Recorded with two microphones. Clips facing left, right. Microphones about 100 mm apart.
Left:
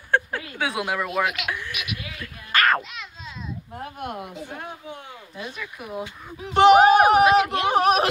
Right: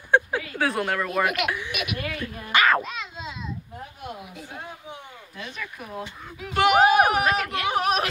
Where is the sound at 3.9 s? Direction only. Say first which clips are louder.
Left 6 dB; 55° left (ahead or behind).